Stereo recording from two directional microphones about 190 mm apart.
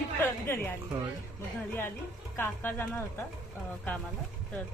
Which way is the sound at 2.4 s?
10° left (ahead or behind).